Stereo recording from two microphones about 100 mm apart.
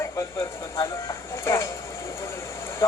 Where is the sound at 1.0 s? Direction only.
30° left (ahead or behind).